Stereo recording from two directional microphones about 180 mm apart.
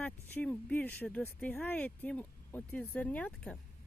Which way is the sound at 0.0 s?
10° left (ahead or behind).